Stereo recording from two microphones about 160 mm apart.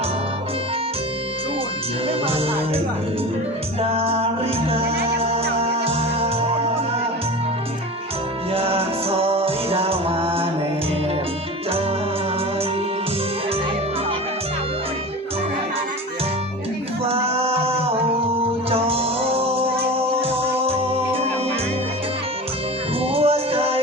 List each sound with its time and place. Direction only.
2.0 s music: 35° right (ahead or behind)
8.5 s music: 35° right (ahead or behind)
17.1 s music: 35° right (ahead or behind)
23.1 s music: 40° right (ahead or behind)